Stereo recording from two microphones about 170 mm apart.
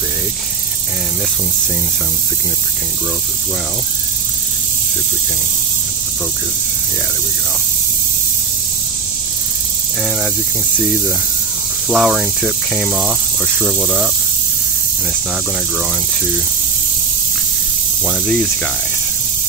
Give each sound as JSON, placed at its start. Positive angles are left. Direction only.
{"t": 11.9, "sound": "speech", "side_deg": 0}